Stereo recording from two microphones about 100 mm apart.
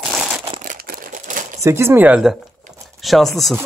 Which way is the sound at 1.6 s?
25° right (ahead or behind).